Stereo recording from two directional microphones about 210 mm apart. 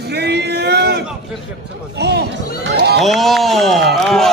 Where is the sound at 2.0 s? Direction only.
50° right (ahead or behind).